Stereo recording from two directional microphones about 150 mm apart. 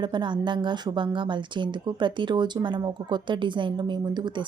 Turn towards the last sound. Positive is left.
turn(degrees=-30)  # may be behind; listen again after turning